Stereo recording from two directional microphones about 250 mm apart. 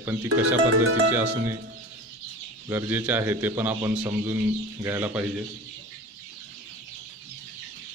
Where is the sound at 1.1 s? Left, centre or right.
Centre.